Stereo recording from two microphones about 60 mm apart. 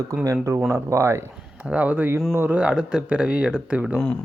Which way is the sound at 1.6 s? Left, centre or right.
Right.